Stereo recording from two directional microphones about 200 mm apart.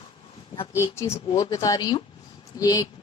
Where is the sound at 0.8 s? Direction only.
15° left (ahead or behind).